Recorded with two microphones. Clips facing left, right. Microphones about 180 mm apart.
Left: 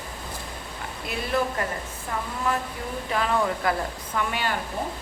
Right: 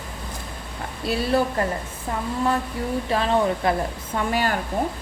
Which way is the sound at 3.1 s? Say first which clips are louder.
Right 3 dB; 25° right (ahead or behind).